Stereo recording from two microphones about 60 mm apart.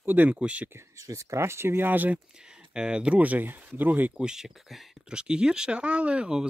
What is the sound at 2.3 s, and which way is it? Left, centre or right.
Speech, centre.